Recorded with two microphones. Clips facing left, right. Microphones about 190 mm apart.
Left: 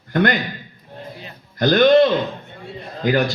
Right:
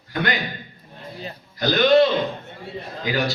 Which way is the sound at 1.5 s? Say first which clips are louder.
Left 5 dB; 50° left (ahead or behind).